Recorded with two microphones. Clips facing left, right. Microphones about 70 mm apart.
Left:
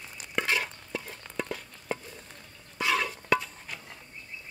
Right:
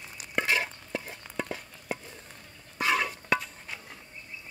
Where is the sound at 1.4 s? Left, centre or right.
Centre.